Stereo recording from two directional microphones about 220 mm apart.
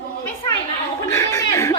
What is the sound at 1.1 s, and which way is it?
Chuckle, 15° left (ahead or behind).